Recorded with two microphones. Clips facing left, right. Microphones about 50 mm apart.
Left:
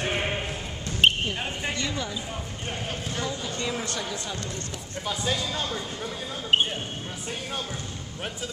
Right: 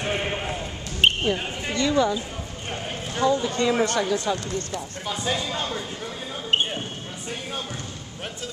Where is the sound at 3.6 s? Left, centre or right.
Right.